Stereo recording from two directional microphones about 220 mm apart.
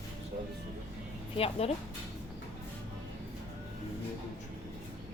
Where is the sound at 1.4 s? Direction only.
25° left (ahead or behind).